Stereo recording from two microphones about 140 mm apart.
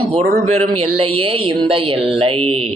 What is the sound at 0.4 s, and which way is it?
A man's voice, 45° right (ahead or behind).